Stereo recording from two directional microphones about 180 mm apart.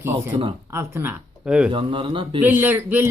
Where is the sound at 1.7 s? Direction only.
30° right (ahead or behind).